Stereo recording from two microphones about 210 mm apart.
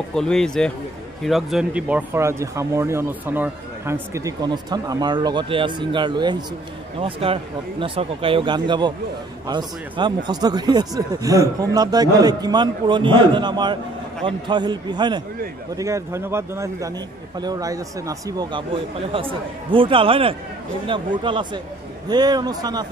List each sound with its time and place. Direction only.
0.1 s speech: 5° left (ahead or behind); by 22.8 s 20° right (ahead or behind)